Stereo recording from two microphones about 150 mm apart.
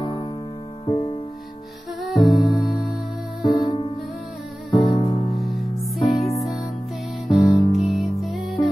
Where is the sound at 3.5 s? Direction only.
30° left (ahead or behind).